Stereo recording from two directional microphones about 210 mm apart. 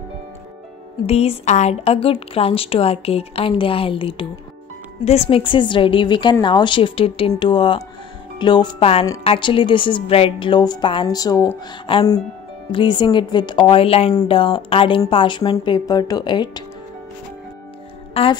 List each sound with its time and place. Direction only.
1.0 s a woman's voice: 30° left (ahead or behind)
18.2 s a woman's voice: 30° left (ahead or behind)